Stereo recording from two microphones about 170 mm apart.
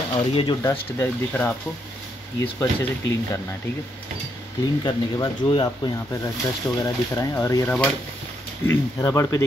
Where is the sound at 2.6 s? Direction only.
20° left (ahead or behind).